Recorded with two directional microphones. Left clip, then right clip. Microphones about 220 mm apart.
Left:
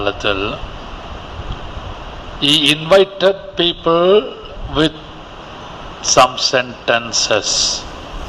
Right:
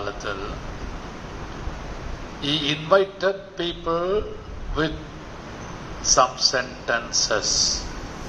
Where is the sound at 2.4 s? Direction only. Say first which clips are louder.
Left 12 dB; 45° left (ahead or behind).